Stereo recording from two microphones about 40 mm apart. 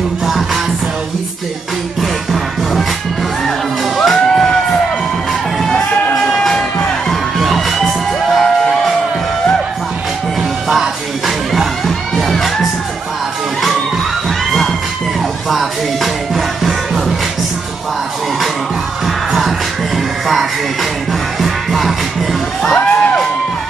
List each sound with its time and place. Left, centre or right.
2.0 s music: centre
4.0 s music: centre
6.3 s music: centre
10.7 s music: centre
12.2 s crowd: centre
15.5 s music: centre
19.0 s music: centre
21.4 s music: centre
22.6 s music: centre